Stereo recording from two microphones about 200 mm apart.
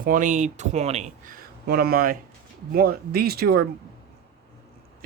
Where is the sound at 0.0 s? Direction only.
40° right (ahead or behind).